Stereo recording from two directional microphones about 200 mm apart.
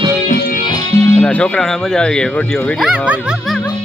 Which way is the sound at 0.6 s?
20° left (ahead or behind).